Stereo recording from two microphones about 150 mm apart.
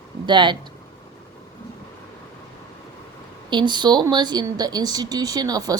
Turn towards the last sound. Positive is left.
turn(degrees=-25)  # may be behind; listen again after turning